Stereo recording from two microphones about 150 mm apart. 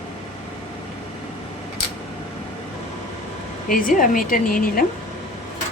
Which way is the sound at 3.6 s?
65° left (ahead or behind).